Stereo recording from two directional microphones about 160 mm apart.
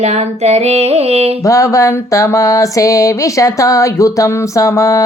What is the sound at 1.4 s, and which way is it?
Music, 20° left (ahead or behind).